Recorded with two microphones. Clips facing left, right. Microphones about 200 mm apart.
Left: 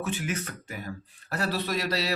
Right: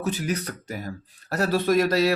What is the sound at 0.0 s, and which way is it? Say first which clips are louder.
A man's voice: right 4 dB; 40° right (ahead or behind).